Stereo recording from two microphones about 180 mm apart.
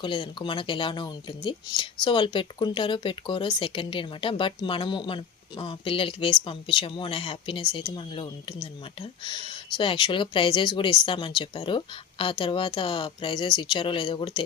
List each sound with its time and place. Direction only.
0.0 s speech: 30° left (ahead or behind)